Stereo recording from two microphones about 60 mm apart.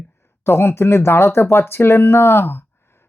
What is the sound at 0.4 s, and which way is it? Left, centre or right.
Speech, left.